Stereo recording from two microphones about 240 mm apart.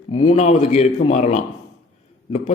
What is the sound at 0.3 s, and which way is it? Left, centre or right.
A man's voice, left.